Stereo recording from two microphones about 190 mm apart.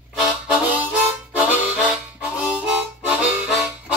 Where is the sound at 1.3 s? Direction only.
5° right (ahead or behind).